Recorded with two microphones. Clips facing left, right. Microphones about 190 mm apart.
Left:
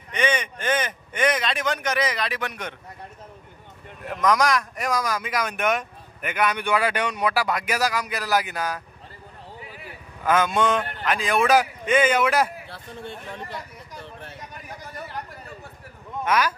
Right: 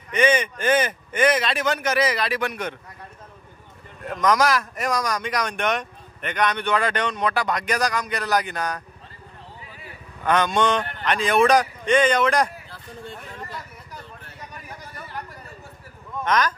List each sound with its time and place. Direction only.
0.1 s speech: 5° right (ahead or behind)
4.0 s speech: centre (ahead or behind)
10.2 s speech: 5° left (ahead or behind)
12.6 s a sound: 70° left (ahead or behind)
16.3 s speech: 10° left (ahead or behind)